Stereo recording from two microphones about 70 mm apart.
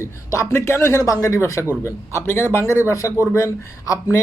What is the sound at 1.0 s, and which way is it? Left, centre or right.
Speech, left.